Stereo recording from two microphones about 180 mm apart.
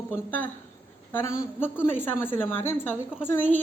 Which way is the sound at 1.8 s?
10° left (ahead or behind).